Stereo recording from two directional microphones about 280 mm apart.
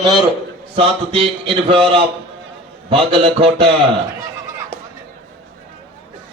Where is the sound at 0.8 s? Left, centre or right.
Centre.